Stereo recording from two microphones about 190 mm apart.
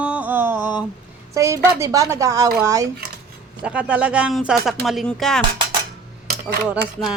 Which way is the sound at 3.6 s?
5° right (ahead or behind).